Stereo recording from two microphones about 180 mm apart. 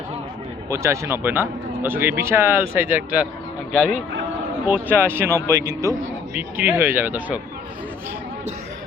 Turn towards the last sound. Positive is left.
turn(degrees=-10)  # may be behind; listen again after turning